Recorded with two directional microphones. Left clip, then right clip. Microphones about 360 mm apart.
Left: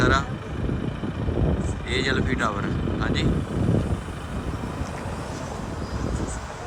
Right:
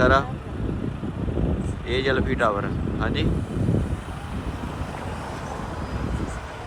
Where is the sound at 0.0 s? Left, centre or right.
Centre.